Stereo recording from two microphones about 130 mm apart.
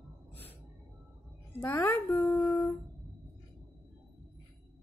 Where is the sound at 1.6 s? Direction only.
20° left (ahead or behind).